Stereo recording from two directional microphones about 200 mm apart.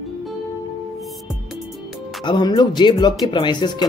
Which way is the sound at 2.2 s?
20° left (ahead or behind).